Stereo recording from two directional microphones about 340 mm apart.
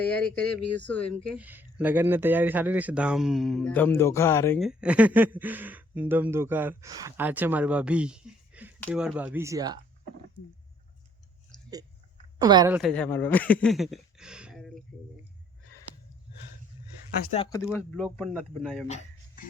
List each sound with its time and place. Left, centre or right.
0.0 s speech: centre
12.4 s speech: centre
17.3 s speech: centre
17.7 s speech: centre
18.9 s music: centre